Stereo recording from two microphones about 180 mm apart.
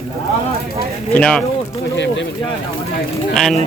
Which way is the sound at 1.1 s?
5° left (ahead or behind).